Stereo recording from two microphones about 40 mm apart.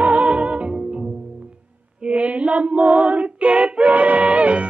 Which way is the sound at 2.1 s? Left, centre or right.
Right.